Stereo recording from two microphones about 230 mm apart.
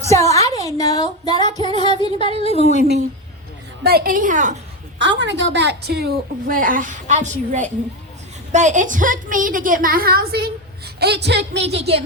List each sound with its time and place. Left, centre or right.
0.0 s speech: centre
1.7 s music: right
2.0 s a woman's voice: left
3.8 s a woman's voice: right
4.9 s a woman's voice: right